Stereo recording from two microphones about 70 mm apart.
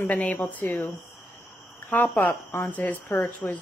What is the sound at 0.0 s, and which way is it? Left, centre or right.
Speech, centre.